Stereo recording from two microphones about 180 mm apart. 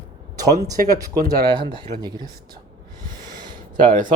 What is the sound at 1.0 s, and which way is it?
Speech, 20° right (ahead or behind).